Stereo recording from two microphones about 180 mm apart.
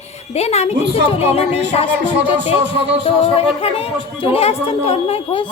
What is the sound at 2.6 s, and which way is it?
Music, 75° right (ahead or behind).